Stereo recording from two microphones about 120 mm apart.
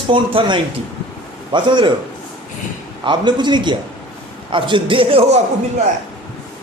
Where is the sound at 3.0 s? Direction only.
40° right (ahead or behind); by 5.4 s 60° right (ahead or behind).